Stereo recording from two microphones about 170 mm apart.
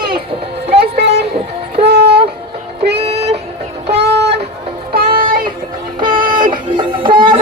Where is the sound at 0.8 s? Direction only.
75° right (ahead or behind).